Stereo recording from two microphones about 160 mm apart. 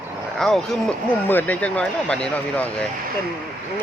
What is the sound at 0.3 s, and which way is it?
Speech, centre (ahead or behind).